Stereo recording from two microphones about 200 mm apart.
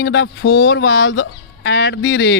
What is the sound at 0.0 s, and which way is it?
A man's voice, 65° left (ahead or behind).